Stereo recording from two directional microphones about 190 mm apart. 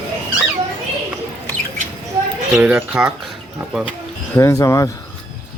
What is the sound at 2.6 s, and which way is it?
Speech, 10° right (ahead or behind).